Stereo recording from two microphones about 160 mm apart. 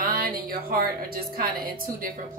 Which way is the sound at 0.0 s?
65° right (ahead or behind).